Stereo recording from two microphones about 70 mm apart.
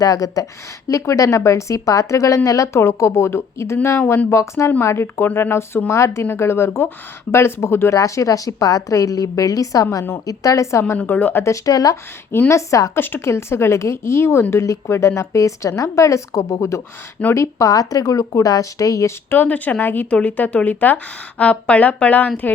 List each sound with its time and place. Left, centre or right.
0.0 s speech: left
7.9 s speech: left
10.9 s a woman's voice: left
11.4 s speech: left
12.5 s speech: left
12.9 s speech: left
17.7 s speech: left
19.3 s a woman's voice: left